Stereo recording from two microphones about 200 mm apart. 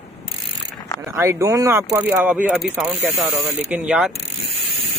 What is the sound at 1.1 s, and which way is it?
A man's voice, 15° right (ahead or behind).